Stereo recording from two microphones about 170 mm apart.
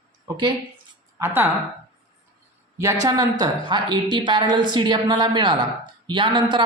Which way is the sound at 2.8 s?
20° right (ahead or behind).